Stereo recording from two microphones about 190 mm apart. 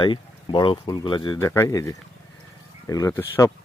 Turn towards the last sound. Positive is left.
turn(degrees=10)  # may be behind; listen again after turning